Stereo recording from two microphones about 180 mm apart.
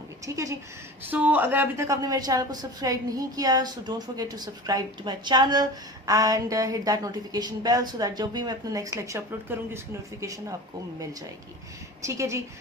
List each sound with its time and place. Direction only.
0.3 s a woman's voice: 15° right (ahead or behind)
12.0 s speech: 15° right (ahead or behind)